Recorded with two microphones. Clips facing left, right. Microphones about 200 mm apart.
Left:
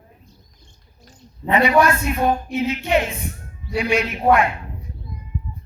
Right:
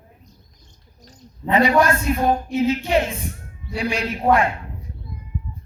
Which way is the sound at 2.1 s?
35° right (ahead or behind).